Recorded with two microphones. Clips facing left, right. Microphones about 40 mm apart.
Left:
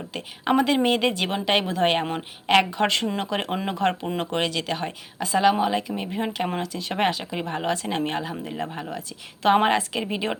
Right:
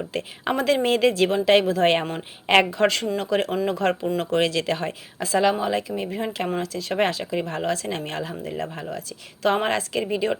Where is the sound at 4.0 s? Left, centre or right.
Left.